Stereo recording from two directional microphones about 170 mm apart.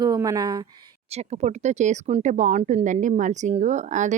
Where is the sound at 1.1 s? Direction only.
40° right (ahead or behind).